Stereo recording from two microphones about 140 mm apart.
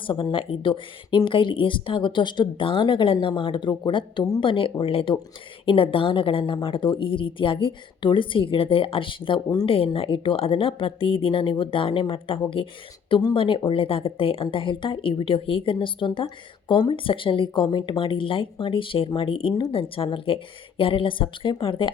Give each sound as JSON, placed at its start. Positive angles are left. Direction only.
{"t": 0.0, "sound": "speech", "side_deg": 35}
{"t": 9.6, "sound": "speech", "side_deg": 40}